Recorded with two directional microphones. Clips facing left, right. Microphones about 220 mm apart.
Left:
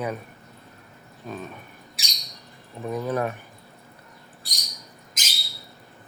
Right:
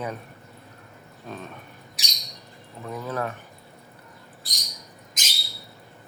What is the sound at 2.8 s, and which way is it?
Speech, 15° left (ahead or behind).